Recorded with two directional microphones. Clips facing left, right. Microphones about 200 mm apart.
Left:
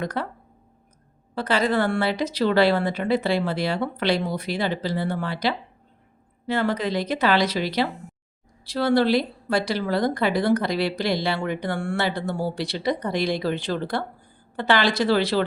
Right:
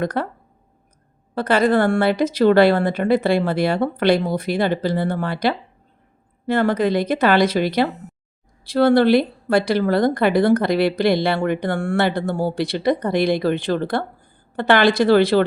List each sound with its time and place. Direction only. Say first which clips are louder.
0.0 s speech: right 5 dB; 55° right (ahead or behind)
1.4 s a woman's voice: right 5 dB; 55° right (ahead or behind)